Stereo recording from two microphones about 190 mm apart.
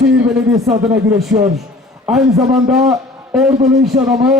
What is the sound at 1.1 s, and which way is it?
A man's voice, 5° right (ahead or behind).